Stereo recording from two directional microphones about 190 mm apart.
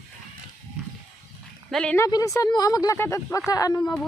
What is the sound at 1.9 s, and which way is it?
Speech, 15° left (ahead or behind).